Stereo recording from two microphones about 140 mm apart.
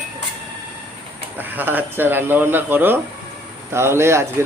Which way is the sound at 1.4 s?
15° right (ahead or behind).